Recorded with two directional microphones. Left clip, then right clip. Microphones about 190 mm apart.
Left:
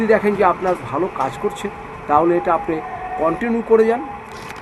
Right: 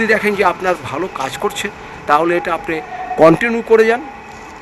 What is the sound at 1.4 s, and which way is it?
Speech, 60° right (ahead or behind).